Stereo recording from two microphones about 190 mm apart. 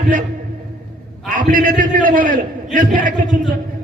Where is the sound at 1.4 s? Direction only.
45° right (ahead or behind).